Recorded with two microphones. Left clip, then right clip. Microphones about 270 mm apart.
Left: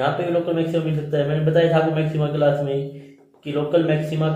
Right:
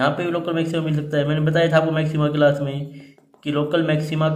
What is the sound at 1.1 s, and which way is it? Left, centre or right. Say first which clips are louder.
Speech: left 1 dB; centre.